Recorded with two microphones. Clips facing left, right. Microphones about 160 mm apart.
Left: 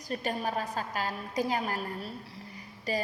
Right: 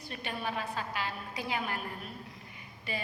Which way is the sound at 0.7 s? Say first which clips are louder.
Left 3 dB; 40° left (ahead or behind).